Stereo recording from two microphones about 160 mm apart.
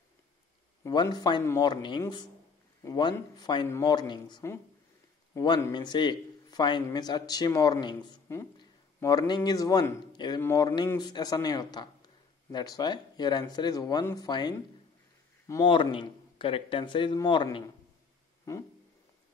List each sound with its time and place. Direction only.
0.8 s a man's voice: 25° left (ahead or behind)
15.7 s a man's voice: 30° left (ahead or behind)